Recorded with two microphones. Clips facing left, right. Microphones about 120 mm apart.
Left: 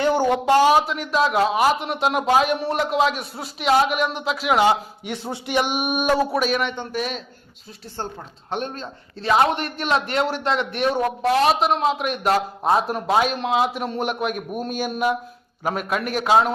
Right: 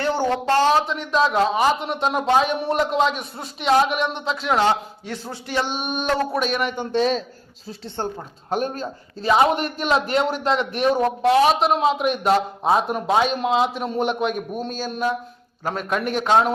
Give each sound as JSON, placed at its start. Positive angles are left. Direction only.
{"t": 0.0, "sound": "a man's voice", "side_deg": 15}
{"t": 6.9, "sound": "a man's voice", "side_deg": -30}
{"t": 8.4, "sound": "a man's voice", "side_deg": -5}